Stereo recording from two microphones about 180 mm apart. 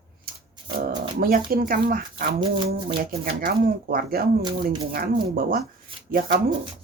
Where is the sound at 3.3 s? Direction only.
55° right (ahead or behind).